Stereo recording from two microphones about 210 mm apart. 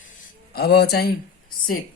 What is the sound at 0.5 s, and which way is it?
Speech, 50° left (ahead or behind).